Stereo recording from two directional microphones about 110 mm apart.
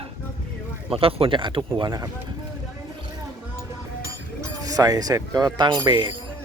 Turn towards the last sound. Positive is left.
turn(degrees=-45)  # may be behind; listen again after turning